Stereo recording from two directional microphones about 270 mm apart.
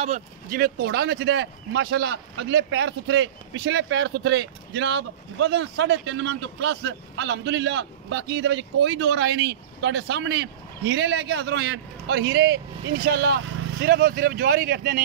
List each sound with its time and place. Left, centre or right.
0.0 s speech: right